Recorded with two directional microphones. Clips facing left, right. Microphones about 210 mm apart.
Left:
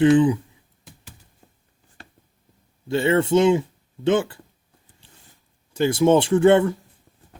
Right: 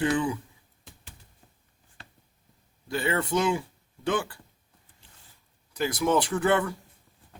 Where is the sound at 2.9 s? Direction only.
25° left (ahead or behind).